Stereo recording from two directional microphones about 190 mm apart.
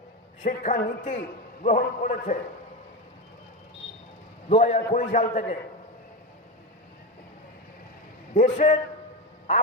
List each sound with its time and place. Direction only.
0.4 s a man's voice: 40° left (ahead or behind)
4.4 s a man's voice: 30° left (ahead or behind)
8.3 s a man's voice: 40° left (ahead or behind)